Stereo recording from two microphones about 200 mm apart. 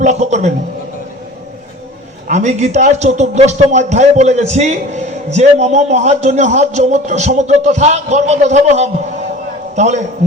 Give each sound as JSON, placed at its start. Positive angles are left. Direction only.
{"t": 0.0, "sound": "a man's voice", "side_deg": -35}
{"t": 2.2, "sound": "a man's voice", "side_deg": -35}